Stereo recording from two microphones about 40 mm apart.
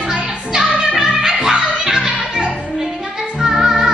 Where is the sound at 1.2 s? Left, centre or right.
Centre.